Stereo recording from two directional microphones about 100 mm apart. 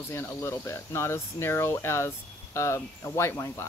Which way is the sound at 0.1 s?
30° left (ahead or behind).